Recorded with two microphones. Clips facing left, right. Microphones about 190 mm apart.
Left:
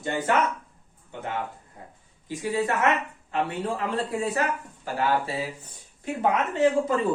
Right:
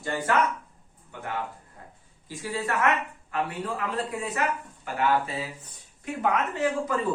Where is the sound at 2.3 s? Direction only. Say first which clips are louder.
Left 4 dB; 20° left (ahead or behind).